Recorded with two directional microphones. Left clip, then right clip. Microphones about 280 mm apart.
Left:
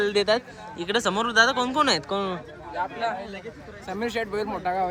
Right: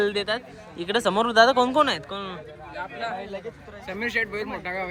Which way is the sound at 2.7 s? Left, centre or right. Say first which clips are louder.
Left 4 dB; left.